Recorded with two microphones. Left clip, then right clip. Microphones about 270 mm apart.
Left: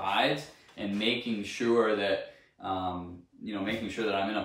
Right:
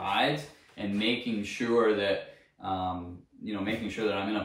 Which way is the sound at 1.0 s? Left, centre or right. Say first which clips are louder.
Even; centre.